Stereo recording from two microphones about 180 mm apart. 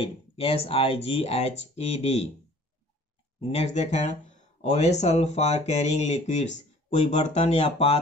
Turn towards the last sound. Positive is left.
turn(degrees=35)  # may be behind; listen again after turning